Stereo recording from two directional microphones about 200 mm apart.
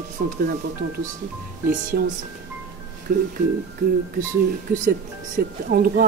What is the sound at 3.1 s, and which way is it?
Speech, 45° right (ahead or behind).